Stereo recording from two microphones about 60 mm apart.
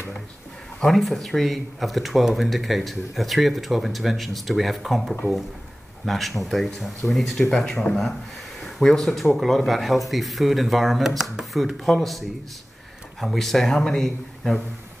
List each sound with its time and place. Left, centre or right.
0.7 s speech: centre
7.6 s speech: centre